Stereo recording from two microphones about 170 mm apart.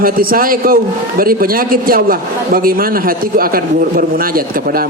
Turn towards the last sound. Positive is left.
turn(degrees=-60)  # may be behind; listen again after turning